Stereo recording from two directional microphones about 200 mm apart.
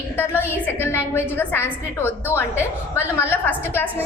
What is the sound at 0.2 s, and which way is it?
A woman's voice, 10° left (ahead or behind).